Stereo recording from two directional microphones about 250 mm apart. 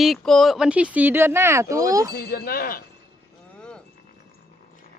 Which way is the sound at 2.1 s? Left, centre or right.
Left.